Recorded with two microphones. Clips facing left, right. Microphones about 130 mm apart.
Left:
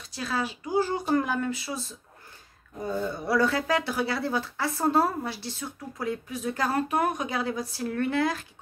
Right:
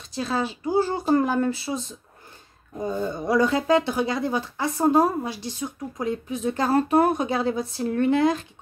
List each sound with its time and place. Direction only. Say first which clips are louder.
0.1 s speech: right 4 dB; 25° right (ahead or behind)